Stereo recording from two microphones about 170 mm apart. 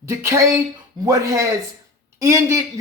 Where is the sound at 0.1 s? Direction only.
15° right (ahead or behind).